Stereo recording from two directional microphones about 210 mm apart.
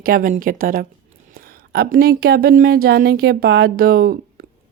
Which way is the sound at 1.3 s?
50° right (ahead or behind).